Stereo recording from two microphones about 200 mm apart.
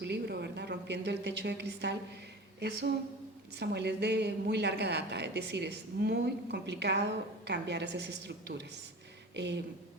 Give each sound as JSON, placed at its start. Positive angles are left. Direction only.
{"t": 0.0, "sound": "a woman's voice", "side_deg": -55}